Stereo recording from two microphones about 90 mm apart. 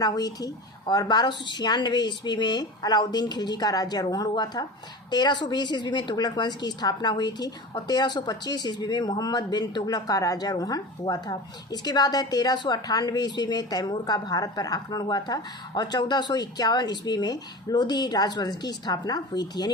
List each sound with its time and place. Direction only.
0.0 s speech: 45° left (ahead or behind)